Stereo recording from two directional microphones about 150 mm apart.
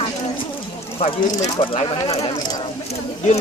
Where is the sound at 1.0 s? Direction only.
45° left (ahead or behind); by 2.6 s 25° left (ahead or behind).